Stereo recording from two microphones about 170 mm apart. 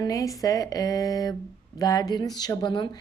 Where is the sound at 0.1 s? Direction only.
20° left (ahead or behind).